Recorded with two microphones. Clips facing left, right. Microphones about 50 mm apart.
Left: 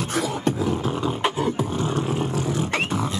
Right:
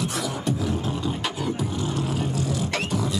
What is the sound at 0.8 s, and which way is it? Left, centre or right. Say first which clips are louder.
Roar: left 4 dB; left.